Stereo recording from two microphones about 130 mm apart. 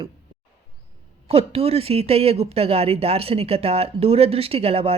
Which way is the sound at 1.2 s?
50° right (ahead or behind).